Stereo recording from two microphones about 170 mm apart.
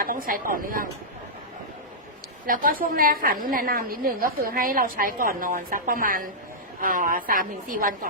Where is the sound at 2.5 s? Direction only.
55° right (ahead or behind).